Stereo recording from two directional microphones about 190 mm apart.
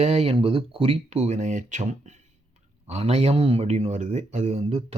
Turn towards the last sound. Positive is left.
turn(degrees=-35)  # may be behind; listen again after turning